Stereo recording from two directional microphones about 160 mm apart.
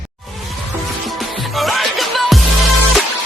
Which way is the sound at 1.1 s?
Centre (ahead or behind).